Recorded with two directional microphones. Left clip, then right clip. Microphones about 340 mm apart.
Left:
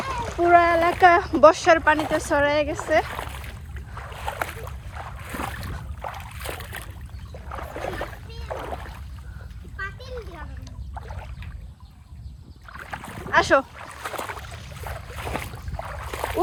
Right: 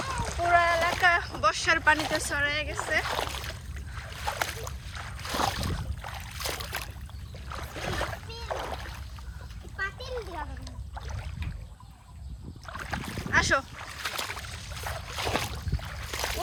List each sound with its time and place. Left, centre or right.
0.0 s splash: left
1.4 s speech: centre
3.1 s a sound: centre
4.3 s boat: centre
5.3 s boat: centre
6.0 s boat: centre
7.9 s rowboat: centre
9.7 s splash: right
10.9 s rowboat: centre
12.6 s boat: centre
15.2 s boat: centre
15.8 s a sound: centre